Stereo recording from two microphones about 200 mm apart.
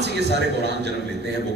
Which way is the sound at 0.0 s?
55° right (ahead or behind).